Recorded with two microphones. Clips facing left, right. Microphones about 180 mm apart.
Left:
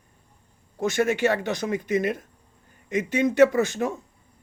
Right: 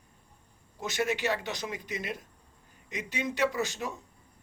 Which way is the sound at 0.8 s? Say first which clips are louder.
Left 8 dB; 50° left (ahead or behind).